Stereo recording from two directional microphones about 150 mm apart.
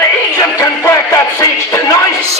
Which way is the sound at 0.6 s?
20° left (ahead or behind).